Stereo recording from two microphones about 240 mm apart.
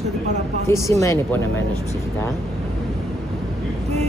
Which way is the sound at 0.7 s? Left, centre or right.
Centre.